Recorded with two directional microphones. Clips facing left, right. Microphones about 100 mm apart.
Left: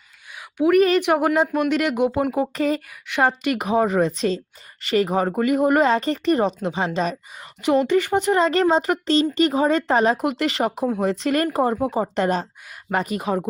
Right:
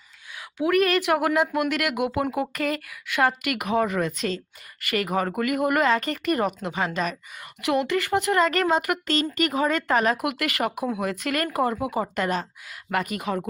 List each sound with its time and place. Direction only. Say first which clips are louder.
0.9 s a woman's voice: left 4 dB; 20° left (ahead or behind)